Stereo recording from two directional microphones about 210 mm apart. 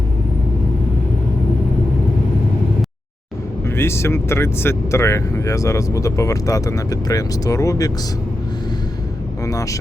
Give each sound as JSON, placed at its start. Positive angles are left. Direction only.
{"t": 3.7, "sound": "speech", "side_deg": 10}
{"t": 9.4, "sound": "speech", "side_deg": 15}